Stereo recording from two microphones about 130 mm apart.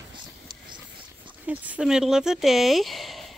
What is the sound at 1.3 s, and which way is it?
Speech, 10° right (ahead or behind).